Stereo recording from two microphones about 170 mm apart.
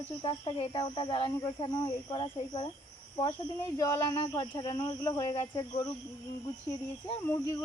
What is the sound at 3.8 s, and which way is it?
Speech, 20° left (ahead or behind).